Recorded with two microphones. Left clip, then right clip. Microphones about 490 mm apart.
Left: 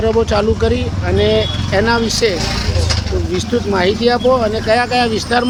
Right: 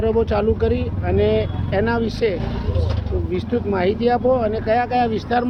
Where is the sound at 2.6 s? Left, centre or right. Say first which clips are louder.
Left 8 dB; right.